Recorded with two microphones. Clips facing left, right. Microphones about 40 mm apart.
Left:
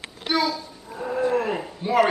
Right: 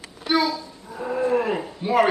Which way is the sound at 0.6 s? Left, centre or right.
Left.